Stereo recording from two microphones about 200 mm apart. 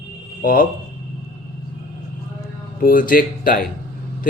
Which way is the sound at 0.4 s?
45° left (ahead or behind).